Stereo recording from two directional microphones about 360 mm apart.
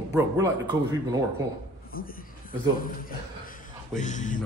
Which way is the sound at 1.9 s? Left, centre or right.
Left.